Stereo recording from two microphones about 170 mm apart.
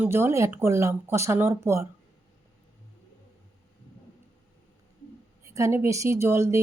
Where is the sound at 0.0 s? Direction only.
15° right (ahead or behind).